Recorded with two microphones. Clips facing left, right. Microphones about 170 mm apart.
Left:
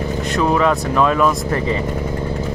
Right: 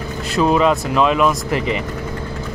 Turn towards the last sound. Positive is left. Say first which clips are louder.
# left 1 dB
turn(degrees=-20)  # may be behind; listen again after turning